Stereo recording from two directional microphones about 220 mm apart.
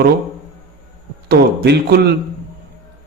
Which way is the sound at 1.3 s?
45° right (ahead or behind).